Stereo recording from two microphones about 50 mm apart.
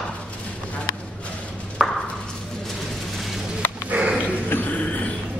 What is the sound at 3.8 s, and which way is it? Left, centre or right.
Dog, right.